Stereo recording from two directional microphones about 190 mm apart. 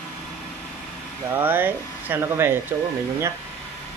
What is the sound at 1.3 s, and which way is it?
Speech, 10° right (ahead or behind).